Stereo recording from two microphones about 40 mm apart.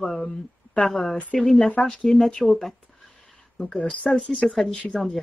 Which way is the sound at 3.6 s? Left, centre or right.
Left.